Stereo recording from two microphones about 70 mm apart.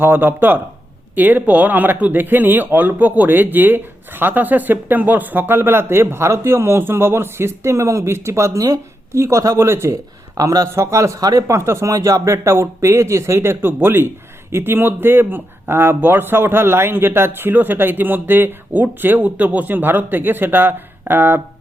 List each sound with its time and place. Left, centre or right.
0.0 s speech: right
9.6 s speech: right
10.3 s speech: right
10.8 s speech: right
11.2 s speech: right
11.4 s speech: right